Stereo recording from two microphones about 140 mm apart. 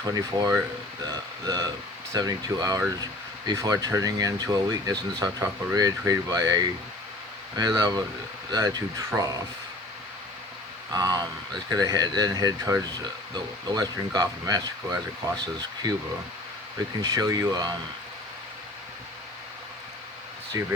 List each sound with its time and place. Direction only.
0.0 s speech: 30° right (ahead or behind)
10.9 s speech: 25° right (ahead or behind)
20.5 s speech: 20° right (ahead or behind)